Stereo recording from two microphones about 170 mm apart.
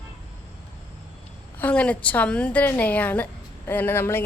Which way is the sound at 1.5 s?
10° left (ahead or behind).